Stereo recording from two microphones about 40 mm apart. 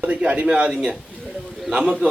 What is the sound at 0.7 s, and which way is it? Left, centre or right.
Speech, centre.